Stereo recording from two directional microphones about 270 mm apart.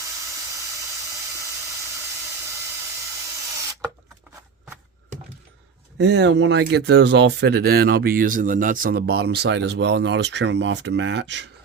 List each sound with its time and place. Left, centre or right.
6.0 s speech: right